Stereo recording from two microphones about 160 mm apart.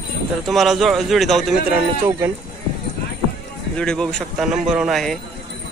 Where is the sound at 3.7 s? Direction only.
5° left (ahead or behind).